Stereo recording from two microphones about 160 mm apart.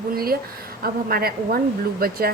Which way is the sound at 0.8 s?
70° right (ahead or behind).